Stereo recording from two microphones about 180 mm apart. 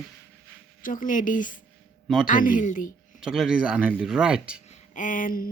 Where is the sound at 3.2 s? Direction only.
5° right (ahead or behind).